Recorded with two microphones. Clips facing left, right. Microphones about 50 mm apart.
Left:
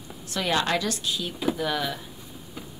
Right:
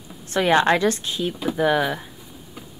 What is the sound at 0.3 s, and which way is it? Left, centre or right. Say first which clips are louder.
Speech: right 8 dB; right.